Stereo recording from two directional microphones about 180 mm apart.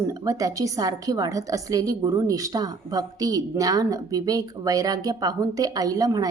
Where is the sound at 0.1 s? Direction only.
20° right (ahead or behind).